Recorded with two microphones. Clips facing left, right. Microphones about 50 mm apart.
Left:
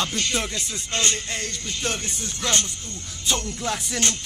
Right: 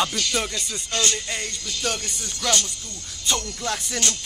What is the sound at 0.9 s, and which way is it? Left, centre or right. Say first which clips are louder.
Music: even; left.